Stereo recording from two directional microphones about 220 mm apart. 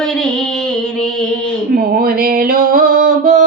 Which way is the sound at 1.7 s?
40° right (ahead or behind).